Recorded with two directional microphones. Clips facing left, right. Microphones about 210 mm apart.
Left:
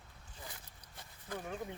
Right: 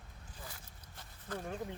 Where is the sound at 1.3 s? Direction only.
10° left (ahead or behind).